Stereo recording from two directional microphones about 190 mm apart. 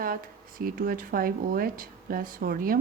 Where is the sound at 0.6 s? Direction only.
50° right (ahead or behind).